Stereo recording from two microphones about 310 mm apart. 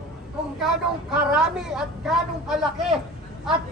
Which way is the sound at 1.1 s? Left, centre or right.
Centre.